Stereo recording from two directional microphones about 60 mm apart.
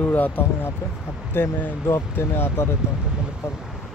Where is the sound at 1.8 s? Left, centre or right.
Left.